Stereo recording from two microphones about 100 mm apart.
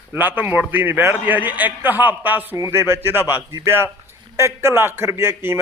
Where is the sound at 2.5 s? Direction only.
30° right (ahead or behind).